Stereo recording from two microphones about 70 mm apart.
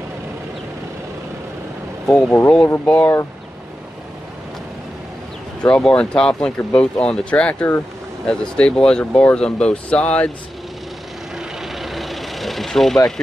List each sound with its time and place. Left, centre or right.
2.0 s speech: centre
2.8 s speech: left
5.7 s speech: centre
11.3 s vehicle: centre